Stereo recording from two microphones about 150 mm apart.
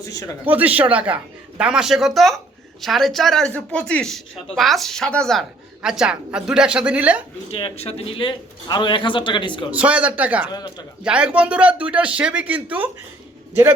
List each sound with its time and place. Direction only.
0.4 s a man's voice: 10° right (ahead or behind)
7.5 s a man's voice: 40° left (ahead or behind)
9.7 s a man's voice: 10° right (ahead or behind)
10.5 s a man's voice: 30° left (ahead or behind)
11.0 s a man's voice: 5° right (ahead or behind)